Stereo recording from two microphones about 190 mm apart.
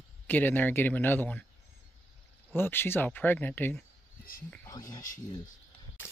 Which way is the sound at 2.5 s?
10° left (ahead or behind).